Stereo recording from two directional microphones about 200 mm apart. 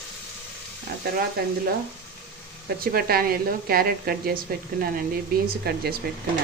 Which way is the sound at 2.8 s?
50° right (ahead or behind).